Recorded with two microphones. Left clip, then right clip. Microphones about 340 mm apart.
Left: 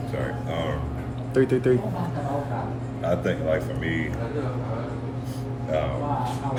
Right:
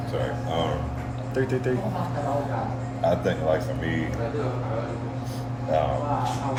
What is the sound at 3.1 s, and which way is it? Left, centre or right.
Speech, centre.